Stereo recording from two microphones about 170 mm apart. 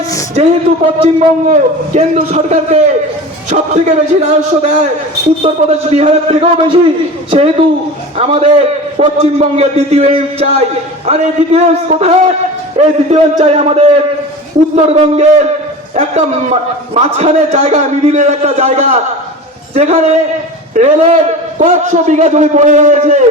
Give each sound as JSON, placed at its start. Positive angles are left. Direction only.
{"t": 0.4, "sound": "a man's voice", "side_deg": -40}